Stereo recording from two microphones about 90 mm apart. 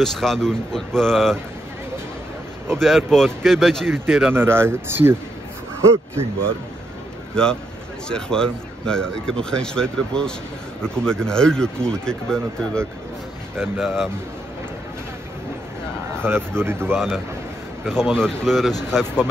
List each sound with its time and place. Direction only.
0.0 s speech: 5° left (ahead or behind)
2.7 s speech: centre (ahead or behind)
4.3 s speech: 25° right (ahead or behind)
7.3 s speech: 10° left (ahead or behind)
16.2 s speech: 25° right (ahead or behind)
16.9 s speech: 5° left (ahead or behind)